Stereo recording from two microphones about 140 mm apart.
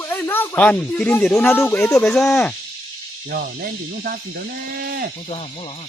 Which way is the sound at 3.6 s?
90° right.